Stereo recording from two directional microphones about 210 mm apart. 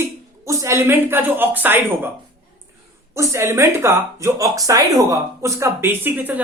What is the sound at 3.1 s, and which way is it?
Speech, 15° right (ahead or behind).